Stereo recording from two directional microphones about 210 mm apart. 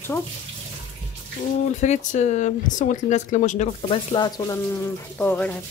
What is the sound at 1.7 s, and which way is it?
Speech, 35° left (ahead or behind).